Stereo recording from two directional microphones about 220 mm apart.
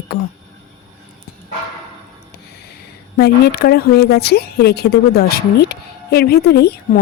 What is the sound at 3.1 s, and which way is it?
Speech, 45° left (ahead or behind).